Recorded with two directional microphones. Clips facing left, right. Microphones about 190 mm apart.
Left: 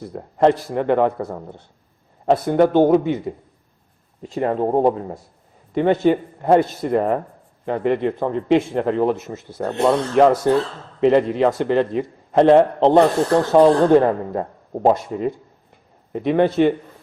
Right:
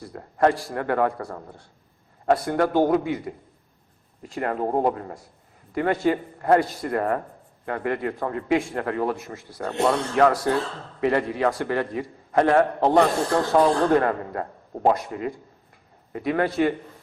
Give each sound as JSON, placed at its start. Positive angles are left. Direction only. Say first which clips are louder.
{"t": 0.0, "sound": "a man's voice", "louder": "left 5 dB", "side_deg": 20}
{"t": 4.2, "sound": "a man's voice", "louder": "left 6 dB", "side_deg": 25}